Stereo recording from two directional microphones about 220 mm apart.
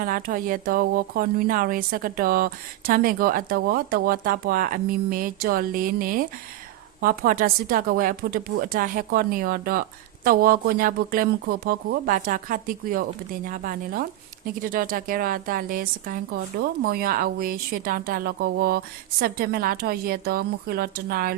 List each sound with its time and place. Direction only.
0.0 s a woman's voice: 40° right (ahead or behind)